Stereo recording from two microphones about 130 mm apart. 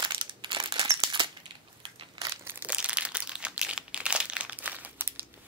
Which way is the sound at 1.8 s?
40° right (ahead or behind).